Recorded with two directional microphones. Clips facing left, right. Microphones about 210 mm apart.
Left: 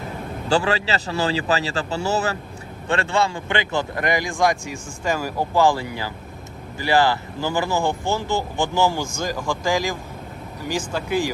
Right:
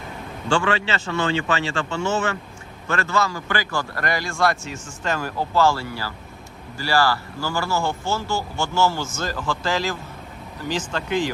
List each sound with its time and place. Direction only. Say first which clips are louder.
0.4 s a man's voice: left 1 dB; 35° left (ahead or behind); by 11.3 s 10° left (ahead or behind)